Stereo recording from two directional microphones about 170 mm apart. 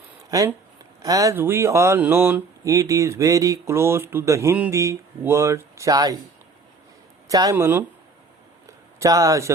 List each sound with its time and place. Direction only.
0.3 s speech: 20° right (ahead or behind)
7.3 s speech: 20° right (ahead or behind)
9.0 s speech: 20° right (ahead or behind)